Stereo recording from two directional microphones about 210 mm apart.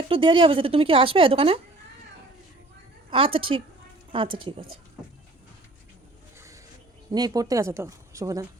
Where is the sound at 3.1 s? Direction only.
25° right (ahead or behind).